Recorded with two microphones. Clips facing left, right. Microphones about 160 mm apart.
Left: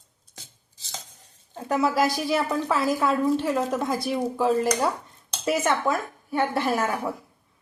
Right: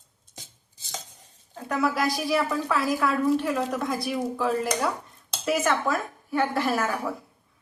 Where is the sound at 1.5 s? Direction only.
25° left (ahead or behind).